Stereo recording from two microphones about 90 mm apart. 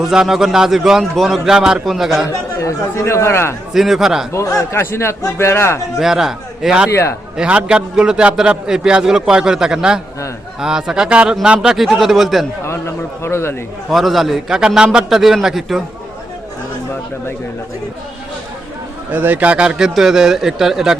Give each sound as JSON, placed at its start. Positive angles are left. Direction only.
{"t": 0.0, "sound": "a man's voice", "side_deg": -5}
{"t": 2.3, "sound": "speech", "side_deg": 35}
{"t": 3.8, "sound": "a man's voice", "side_deg": -5}
{"t": 4.3, "sound": "a man's voice", "side_deg": 35}
{"t": 6.0, "sound": "a man's voice", "side_deg": -5}
{"t": 6.9, "sound": "speech", "side_deg": 30}
{"t": 7.3, "sound": "a man's voice", "side_deg": -10}
{"t": 12.6, "sound": "a man's voice", "side_deg": 30}
{"t": 13.9, "sound": "a man's voice", "side_deg": 0}
{"t": 19.1, "sound": "a man's voice", "side_deg": -20}